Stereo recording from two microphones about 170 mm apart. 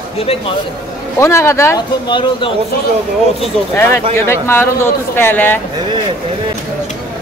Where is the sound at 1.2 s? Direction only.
15° left (ahead or behind).